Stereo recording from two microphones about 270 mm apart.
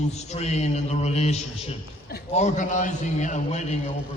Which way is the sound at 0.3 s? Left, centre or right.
Left.